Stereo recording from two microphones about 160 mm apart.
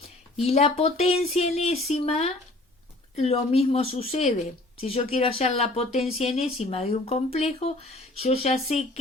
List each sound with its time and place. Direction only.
0.4 s speech: 40° left (ahead or behind)